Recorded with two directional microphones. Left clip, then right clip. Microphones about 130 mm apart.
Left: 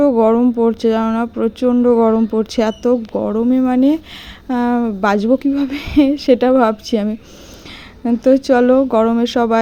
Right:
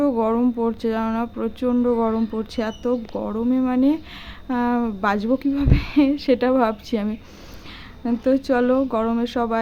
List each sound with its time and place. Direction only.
0.0 s speech: 40° left (ahead or behind)